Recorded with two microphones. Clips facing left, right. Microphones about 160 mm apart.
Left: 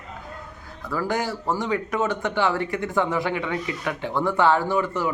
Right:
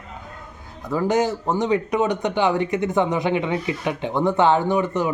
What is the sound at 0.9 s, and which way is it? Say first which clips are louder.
Speech: right 6 dB; 20° right (ahead or behind).